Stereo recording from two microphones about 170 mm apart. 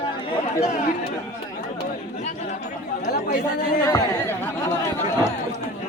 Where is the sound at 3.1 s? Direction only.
70° left (ahead or behind).